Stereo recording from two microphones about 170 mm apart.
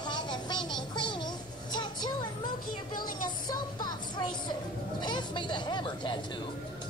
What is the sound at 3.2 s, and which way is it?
Child singing, 25° left (ahead or behind).